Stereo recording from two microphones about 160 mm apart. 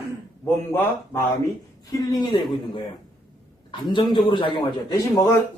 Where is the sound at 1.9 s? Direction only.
25° left (ahead or behind).